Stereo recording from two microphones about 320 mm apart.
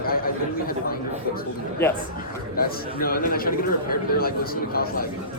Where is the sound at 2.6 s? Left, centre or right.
Left.